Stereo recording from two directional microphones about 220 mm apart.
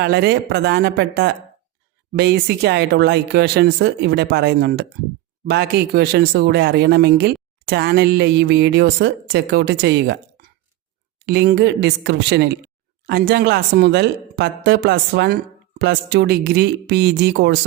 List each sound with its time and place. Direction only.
0.0 s speech: 45° right (ahead or behind)